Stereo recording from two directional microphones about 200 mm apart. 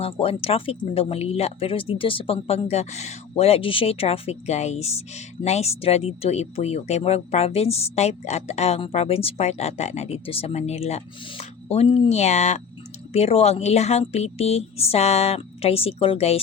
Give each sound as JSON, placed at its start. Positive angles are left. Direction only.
{"t": 0.0, "sound": "speech", "side_deg": 30}